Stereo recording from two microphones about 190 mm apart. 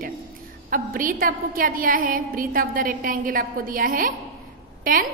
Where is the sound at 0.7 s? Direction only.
50° right (ahead or behind).